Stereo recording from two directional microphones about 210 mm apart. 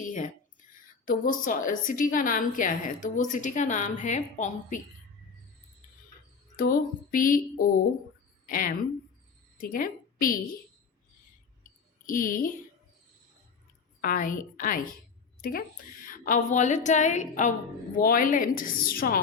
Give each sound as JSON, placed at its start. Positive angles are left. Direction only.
{"t": 0.0, "sound": "a sound", "side_deg": 35}
{"t": 1.0, "sound": "a woman's voice", "side_deg": 40}
{"t": 6.6, "sound": "a woman's voice", "side_deg": 40}
{"t": 8.4, "sound": "a woman's voice", "side_deg": 40}
{"t": 12.0, "sound": "a woman's voice", "side_deg": 40}
{"t": 14.0, "sound": "a woman's voice", "side_deg": 40}